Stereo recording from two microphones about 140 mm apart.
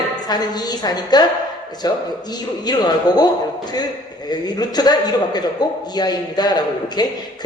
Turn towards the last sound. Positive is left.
turn(degrees=30)  # may be behind; listen again after turning